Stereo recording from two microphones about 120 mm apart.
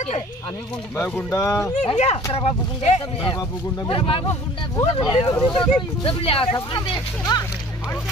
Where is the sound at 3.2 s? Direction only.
40° left (ahead or behind).